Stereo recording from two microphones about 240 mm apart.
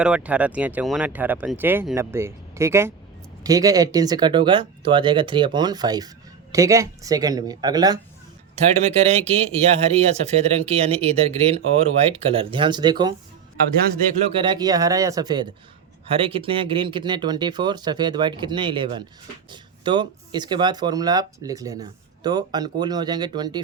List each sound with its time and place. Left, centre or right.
0.0 s speech: centre
8.8 s speech: right
14.3 s speech: right